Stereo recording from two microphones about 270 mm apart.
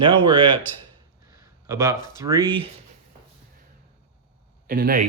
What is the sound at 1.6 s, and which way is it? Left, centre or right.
Speech, centre.